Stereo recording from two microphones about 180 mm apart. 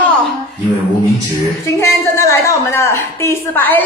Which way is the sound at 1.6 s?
15° left (ahead or behind).